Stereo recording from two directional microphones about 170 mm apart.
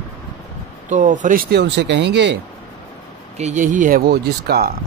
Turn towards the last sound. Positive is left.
turn(degrees=-65)  # may be behind; listen again after turning